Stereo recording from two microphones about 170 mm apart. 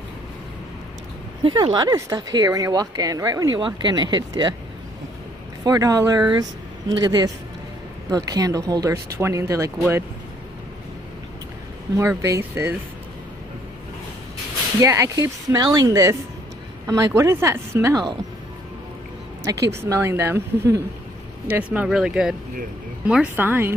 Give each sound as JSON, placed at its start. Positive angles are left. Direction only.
{"t": 1.4, "sound": "speech", "side_deg": -25}
{"t": 5.7, "sound": "speech", "side_deg": -20}
{"t": 12.0, "sound": "a woman's voice", "side_deg": -15}
{"t": 14.8, "sound": "a woman's voice", "side_deg": -20}
{"t": 19.7, "sound": "a woman's voice", "side_deg": -15}